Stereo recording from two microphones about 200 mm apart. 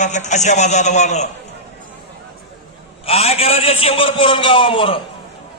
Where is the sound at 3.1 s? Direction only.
30° left (ahead or behind).